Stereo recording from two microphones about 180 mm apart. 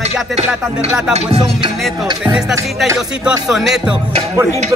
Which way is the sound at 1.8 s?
5° right (ahead or behind).